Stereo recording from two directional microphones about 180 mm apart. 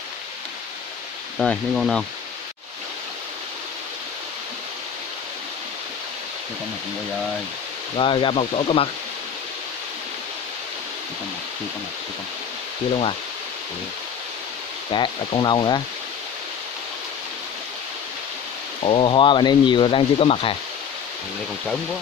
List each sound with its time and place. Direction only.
1.4 s speech: centre (ahead or behind)
8.0 s speech: 30° left (ahead or behind)
14.9 s speech: 25° left (ahead or behind)
18.9 s speech: 30° left (ahead or behind)